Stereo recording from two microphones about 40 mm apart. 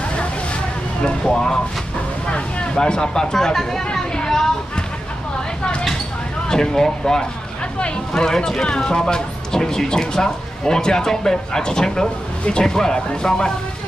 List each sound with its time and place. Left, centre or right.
1.2 s speech: centre
2.2 s speech: left; by 4.0 s centre
4.2 s children playing: centre
6.5 s speech: centre